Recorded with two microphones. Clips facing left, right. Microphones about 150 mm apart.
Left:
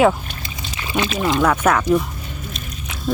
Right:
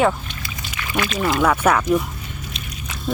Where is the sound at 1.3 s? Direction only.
5° right (ahead or behind).